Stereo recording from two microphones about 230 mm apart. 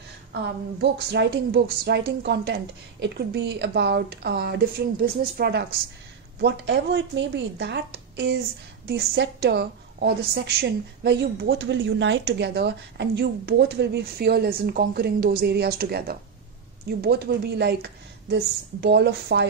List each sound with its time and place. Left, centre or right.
0.3 s a woman's voice: right